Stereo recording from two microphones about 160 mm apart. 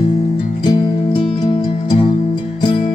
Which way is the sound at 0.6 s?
30° left (ahead or behind).